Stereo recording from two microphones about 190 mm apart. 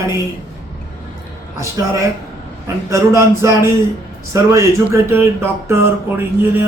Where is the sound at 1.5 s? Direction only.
15° right (ahead or behind).